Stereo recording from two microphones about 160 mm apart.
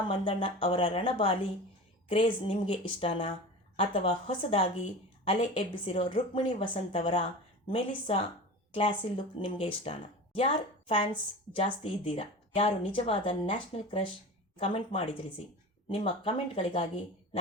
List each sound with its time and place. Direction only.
0.0 s a woman's voice: 35° left (ahead or behind)